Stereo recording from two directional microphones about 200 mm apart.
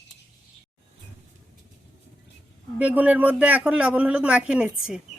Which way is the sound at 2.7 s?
10° right (ahead or behind).